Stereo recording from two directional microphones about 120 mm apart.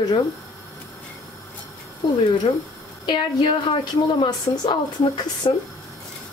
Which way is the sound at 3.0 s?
40° left (ahead or behind).